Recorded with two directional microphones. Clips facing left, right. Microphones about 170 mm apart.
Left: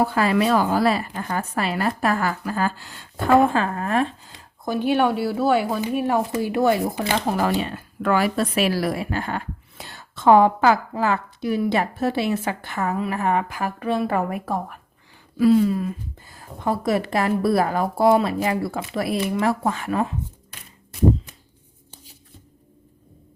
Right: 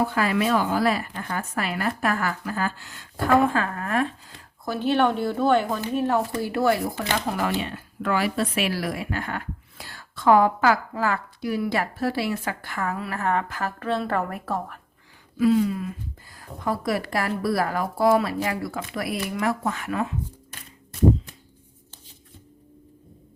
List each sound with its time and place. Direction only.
0.0 s speech: 35° left (ahead or behind)
4.6 s speech: 15° left (ahead or behind)
15.4 s speech: 35° left (ahead or behind)
16.3 s speech: 25° left (ahead or behind)